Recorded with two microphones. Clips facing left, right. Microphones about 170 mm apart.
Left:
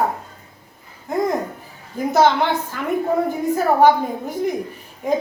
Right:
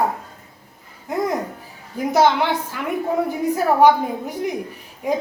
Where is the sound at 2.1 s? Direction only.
10° right (ahead or behind).